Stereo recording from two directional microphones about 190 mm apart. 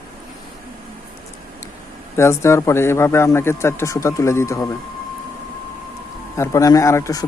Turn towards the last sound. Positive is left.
turn(degrees=20)  # may be behind; listen again after turning